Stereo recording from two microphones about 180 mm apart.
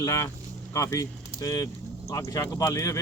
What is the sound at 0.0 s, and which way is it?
Speech, 15° left (ahead or behind).